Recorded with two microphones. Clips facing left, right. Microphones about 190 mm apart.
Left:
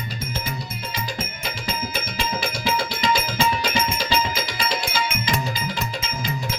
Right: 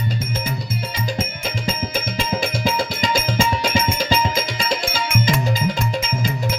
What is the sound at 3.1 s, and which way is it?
Music, 45° right (ahead or behind).